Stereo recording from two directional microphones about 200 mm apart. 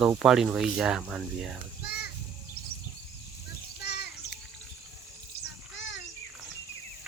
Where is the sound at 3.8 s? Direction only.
55° left (ahead or behind).